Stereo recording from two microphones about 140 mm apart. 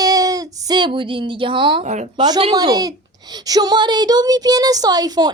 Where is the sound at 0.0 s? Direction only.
25° right (ahead or behind).